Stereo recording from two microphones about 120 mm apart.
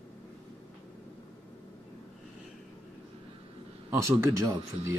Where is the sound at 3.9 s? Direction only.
25° right (ahead or behind).